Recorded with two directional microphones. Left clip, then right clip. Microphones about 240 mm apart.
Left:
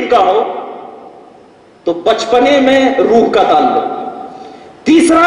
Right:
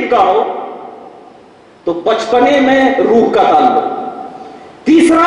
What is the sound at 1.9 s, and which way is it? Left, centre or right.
Speech, centre.